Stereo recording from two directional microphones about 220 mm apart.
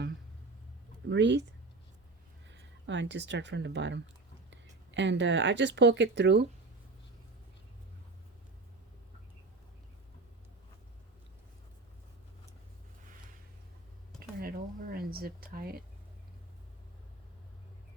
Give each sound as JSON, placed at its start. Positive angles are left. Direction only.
{"t": 1.1, "sound": "speech", "side_deg": -55}
{"t": 2.5, "sound": "speech", "side_deg": -55}
{"t": 14.4, "sound": "a sound", "side_deg": -40}
{"t": 15.5, "sound": "speech", "side_deg": -45}